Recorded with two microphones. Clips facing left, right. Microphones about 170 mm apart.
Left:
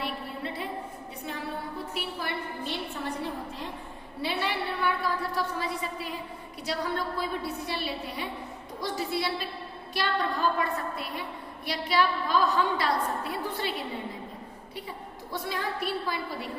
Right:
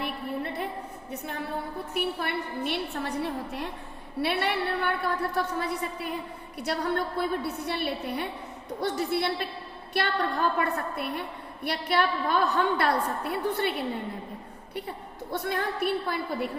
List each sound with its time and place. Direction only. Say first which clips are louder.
0.0 s a sound: right 3 dB; 55° right (ahead or behind)
1.9 s a woman's voice: right 7 dB; 55° right (ahead or behind)
14.8 s a woman's voice: right 3 dB; 55° right (ahead or behind)